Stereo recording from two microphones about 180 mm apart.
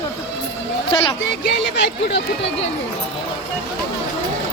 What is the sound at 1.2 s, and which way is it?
Speech, 90° left.